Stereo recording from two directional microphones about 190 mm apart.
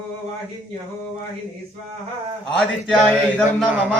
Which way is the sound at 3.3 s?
5° left (ahead or behind).